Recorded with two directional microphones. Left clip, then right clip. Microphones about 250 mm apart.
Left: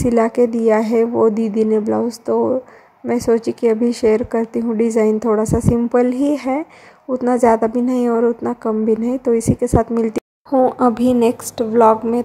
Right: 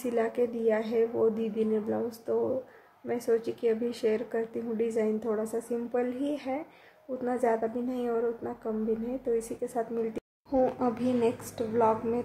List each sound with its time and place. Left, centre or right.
0.0 s speech: left